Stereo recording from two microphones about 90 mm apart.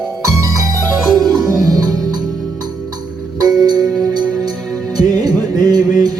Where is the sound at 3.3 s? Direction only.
50° right (ahead or behind).